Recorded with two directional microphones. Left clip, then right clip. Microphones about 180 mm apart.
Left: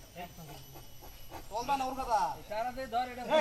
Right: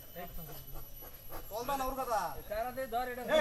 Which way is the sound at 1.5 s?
25° right (ahead or behind).